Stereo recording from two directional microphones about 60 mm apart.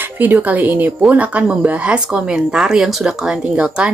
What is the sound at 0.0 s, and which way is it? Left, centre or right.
A woman's voice, right.